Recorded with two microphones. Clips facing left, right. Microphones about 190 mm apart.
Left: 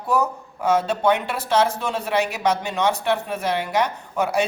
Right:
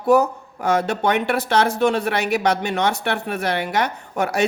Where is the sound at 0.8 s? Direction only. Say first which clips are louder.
Even; 65° right (ahead or behind).